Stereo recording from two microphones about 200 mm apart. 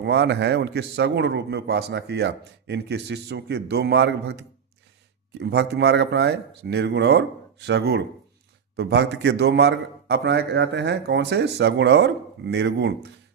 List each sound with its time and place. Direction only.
0.0 s a man's voice: 55° right (ahead or behind)